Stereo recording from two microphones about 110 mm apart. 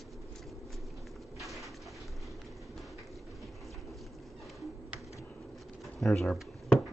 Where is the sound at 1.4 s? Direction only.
Centre (ahead or behind).